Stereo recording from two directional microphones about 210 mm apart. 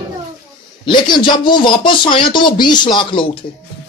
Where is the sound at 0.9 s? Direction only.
20° left (ahead or behind).